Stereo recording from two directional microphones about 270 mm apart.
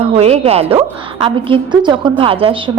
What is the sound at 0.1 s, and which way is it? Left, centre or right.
A woman's voice, right.